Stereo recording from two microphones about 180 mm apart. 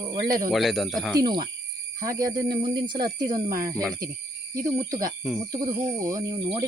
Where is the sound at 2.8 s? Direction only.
25° right (ahead or behind).